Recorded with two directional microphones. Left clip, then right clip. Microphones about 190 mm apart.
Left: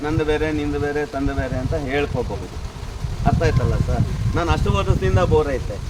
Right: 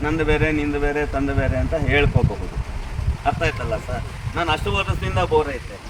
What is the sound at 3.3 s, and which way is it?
Speech, 35° right (ahead or behind).